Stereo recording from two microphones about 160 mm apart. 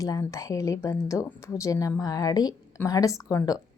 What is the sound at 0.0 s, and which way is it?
A woman's voice, 20° left (ahead or behind).